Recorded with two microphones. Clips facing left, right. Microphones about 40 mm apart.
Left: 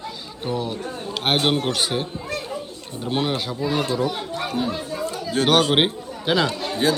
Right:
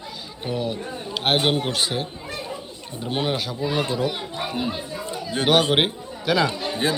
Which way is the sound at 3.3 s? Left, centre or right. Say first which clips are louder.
Even; centre.